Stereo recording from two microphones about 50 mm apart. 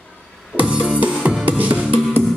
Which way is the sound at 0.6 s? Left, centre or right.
Right.